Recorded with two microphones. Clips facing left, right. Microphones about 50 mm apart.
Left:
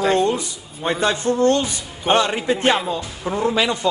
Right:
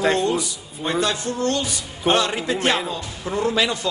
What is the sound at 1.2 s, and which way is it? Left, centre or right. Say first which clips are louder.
Music: left 6 dB; left.